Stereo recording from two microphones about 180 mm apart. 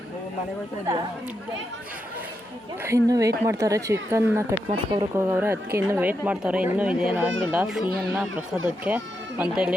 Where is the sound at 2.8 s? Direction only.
15° right (ahead or behind).